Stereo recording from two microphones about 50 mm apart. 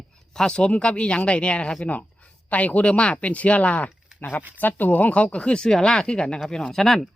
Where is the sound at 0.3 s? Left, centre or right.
Centre.